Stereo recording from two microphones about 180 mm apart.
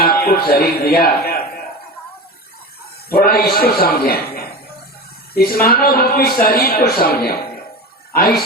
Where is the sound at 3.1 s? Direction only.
55° left (ahead or behind).